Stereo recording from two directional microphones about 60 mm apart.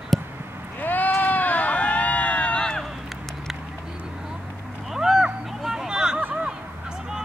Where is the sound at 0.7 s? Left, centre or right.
Left.